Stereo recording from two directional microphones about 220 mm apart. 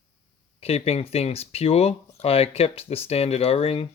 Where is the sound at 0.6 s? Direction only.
25° left (ahead or behind).